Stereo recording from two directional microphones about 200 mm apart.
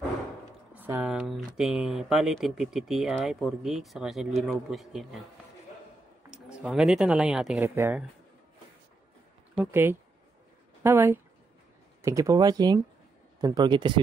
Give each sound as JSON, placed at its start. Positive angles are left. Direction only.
{"t": 0.7, "sound": "speech", "side_deg": -10}
{"t": 6.3, "sound": "speech", "side_deg": -5}
{"t": 9.6, "sound": "speech", "side_deg": -10}